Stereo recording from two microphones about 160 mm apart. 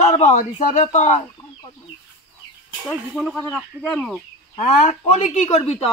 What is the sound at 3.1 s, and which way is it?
Speech, centre (ahead or behind).